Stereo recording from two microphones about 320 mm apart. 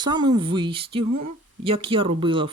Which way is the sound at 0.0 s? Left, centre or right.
Centre.